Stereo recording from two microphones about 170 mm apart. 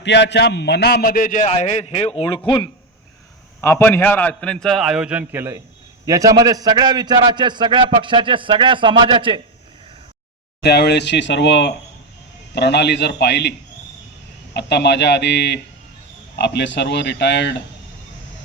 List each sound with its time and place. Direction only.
0.0 s a man's voice: 90° left; by 2.4 s 30° left (ahead or behind)
3.6 s a man's voice: 15° left (ahead or behind); by 9.4 s 30° right (ahead or behind)
10.6 s a man's voice: 75° left (ahead or behind)
14.5 s speech: 90° left